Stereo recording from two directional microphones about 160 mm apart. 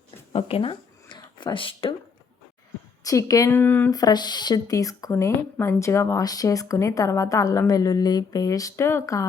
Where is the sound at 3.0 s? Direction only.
20° left (ahead or behind).